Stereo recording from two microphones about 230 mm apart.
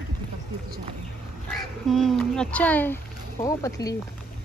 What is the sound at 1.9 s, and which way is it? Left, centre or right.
Speech, centre.